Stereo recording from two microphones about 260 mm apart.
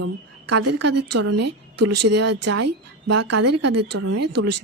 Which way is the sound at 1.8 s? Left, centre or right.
Right.